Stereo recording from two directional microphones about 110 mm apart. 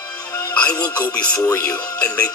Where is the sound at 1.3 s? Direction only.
25° left (ahead or behind).